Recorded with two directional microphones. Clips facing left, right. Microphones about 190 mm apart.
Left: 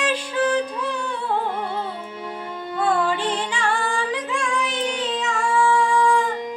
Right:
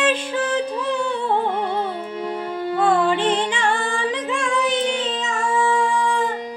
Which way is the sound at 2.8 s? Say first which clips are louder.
Right 3 dB; 20° right (ahead or behind).